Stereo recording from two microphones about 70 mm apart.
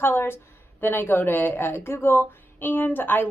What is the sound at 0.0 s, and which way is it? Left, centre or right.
A woman's voice, left.